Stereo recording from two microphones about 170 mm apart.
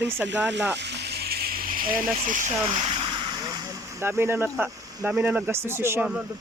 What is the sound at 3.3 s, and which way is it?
Speech, 25° right (ahead or behind).